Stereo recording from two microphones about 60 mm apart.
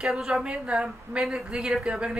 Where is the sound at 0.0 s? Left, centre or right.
Centre.